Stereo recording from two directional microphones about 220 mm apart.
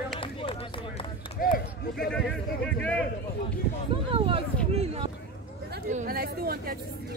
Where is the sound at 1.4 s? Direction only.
40° left (ahead or behind).